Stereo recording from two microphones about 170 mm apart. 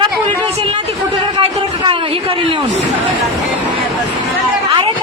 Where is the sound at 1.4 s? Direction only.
30° right (ahead or behind).